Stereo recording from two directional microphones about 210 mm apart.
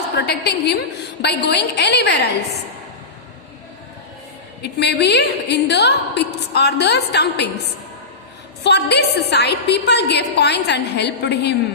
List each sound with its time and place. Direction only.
0.2 s a woman's voice: 50° left (ahead or behind)
4.6 s a woman's voice: 50° left (ahead or behind)
8.6 s a woman's voice: 50° left (ahead or behind)